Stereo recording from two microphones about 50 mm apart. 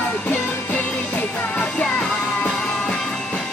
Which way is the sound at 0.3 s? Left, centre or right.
Left.